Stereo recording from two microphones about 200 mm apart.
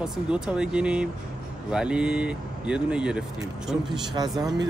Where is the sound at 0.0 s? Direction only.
5° right (ahead or behind).